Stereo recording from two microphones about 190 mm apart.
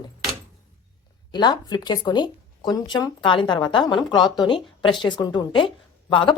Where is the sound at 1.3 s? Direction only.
20° left (ahead or behind).